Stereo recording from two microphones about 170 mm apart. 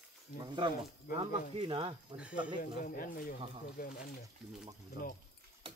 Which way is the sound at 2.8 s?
55° left (ahead or behind).